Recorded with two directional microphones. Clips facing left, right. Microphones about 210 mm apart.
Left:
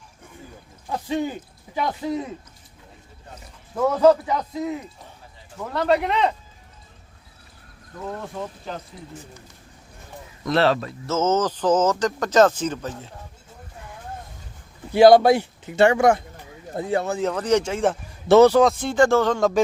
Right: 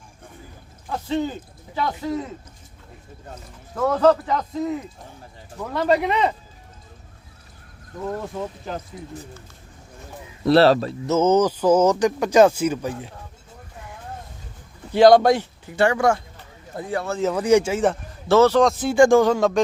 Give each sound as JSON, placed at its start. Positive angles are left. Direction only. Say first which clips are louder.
{"t": 0.9, "sound": "speech", "louder": "right 1 dB", "side_deg": 15}
{"t": 3.8, "sound": "a man's voice", "louder": "left 1 dB", "side_deg": 10}
{"t": 8.0, "sound": "speech", "louder": "right 3 dB", "side_deg": 0}
{"t": 10.4, "sound": "speech", "louder": "right 5 dB", "side_deg": -35}
{"t": 11.0, "sound": "speech", "louder": "right 4 dB", "side_deg": -15}
{"t": 14.9, "sound": "a man's voice", "louder": "left 1 dB", "side_deg": 5}
{"t": 15.6, "sound": "speech", "louder": "left 3 dB", "side_deg": 25}
{"t": 17.2, "sound": "speech", "louder": "right 7 dB", "side_deg": -5}
{"t": 18.3, "sound": "a man's voice", "louder": "left 2 dB", "side_deg": 15}
{"t": 18.6, "sound": "speech", "louder": "right 2 dB", "side_deg": 0}